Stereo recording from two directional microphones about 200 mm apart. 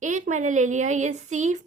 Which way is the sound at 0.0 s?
40° right (ahead or behind).